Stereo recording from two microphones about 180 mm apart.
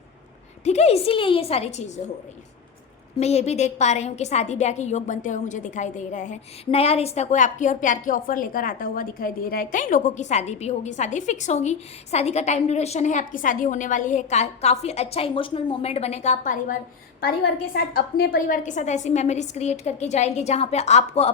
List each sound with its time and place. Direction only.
0.6 s a woman's voice: 35° left (ahead or behind)
3.2 s a woman's voice: 35° left (ahead or behind)
17.2 s a woman's voice: 60° left (ahead or behind); by 21.3 s 35° left (ahead or behind)